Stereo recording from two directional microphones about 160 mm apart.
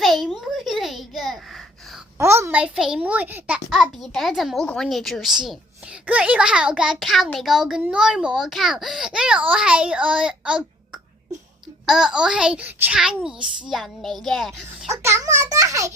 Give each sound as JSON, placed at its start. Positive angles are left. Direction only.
{"t": 0.0, "sound": "a sound", "side_deg": 0}
{"t": 2.1, "sound": "a child's voice", "side_deg": -15}
{"t": 15.0, "sound": "a child's voice", "side_deg": -15}